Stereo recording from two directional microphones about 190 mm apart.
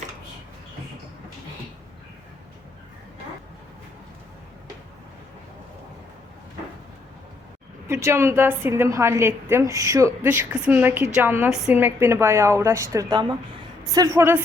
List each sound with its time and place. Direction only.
7.9 s a woman's voice: 15° right (ahead or behind)